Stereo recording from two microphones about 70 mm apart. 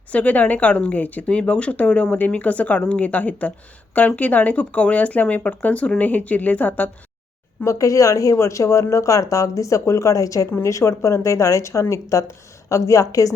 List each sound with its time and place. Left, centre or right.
0.1 s speech: left
7.6 s speech: left